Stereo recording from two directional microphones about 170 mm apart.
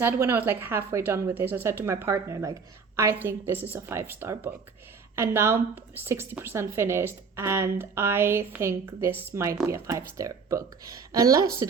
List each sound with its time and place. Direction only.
0.0 s a woman's voice: 15° right (ahead or behind)